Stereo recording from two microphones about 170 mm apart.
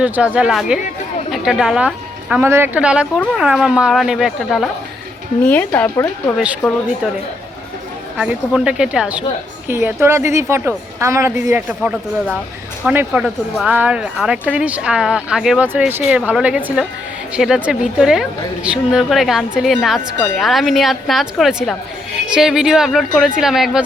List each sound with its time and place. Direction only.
0.0 s a woman's voice: 5° right (ahead or behind)
2.3 s a woman's voice: 15° right (ahead or behind); by 6.3 s 15° left (ahead or behind)
8.2 s a woman's voice: 5° right (ahead or behind)